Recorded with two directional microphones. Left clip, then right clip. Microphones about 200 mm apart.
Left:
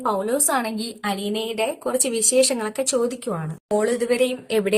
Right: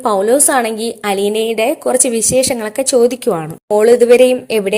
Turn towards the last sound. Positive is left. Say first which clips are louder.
# right 10 dB
turn(degrees=-25)  # may be behind; listen again after turning